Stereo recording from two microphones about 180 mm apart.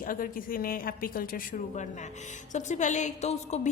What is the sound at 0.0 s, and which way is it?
A woman's voice, 50° left (ahead or behind).